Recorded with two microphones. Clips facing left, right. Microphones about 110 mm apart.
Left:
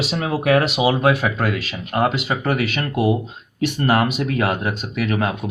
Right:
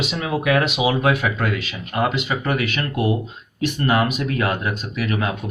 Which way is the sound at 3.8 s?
35° left (ahead or behind).